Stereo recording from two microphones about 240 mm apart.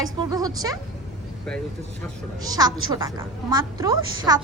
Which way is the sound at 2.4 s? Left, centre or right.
Centre.